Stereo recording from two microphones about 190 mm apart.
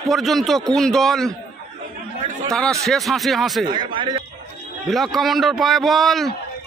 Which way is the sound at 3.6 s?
25° right (ahead or behind).